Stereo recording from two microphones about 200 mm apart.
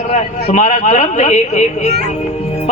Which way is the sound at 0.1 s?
35° left (ahead or behind).